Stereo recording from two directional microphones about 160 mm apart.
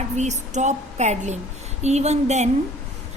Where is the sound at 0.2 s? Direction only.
45° right (ahead or behind).